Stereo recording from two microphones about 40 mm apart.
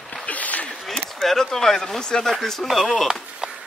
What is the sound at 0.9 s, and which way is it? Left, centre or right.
Speech, centre.